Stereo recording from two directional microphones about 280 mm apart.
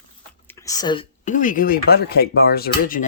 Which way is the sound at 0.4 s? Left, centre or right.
Centre.